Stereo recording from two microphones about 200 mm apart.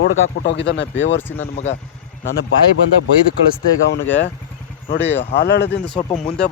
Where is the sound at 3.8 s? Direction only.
65° left (ahead or behind).